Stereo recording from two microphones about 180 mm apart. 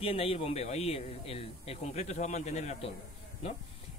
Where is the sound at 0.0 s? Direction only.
30° left (ahead or behind).